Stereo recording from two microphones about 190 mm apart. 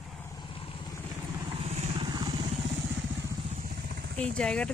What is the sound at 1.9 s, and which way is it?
Vehicle, 20° right (ahead or behind).